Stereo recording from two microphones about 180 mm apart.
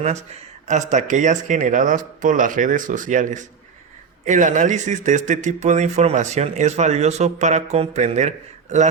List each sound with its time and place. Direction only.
0.7 s speech: 45° right (ahead or behind)